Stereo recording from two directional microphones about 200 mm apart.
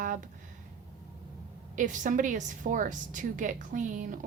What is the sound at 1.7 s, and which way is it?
Speech, 40° right (ahead or behind).